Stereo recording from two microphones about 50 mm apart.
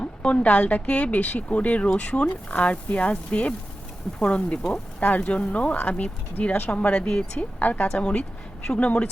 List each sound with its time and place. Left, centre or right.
0.0 s speech: left
7.9 s speech: centre